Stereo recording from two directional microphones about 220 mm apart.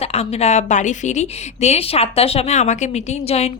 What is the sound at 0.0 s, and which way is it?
Speech, 30° left (ahead or behind).